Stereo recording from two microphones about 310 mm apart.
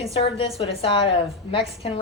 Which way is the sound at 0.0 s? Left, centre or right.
Centre.